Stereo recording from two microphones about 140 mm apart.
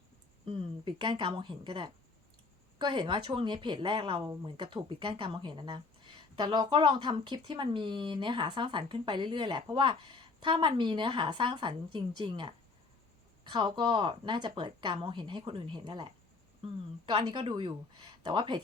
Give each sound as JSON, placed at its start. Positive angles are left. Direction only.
{"t": 0.4, "sound": "speech", "side_deg": -40}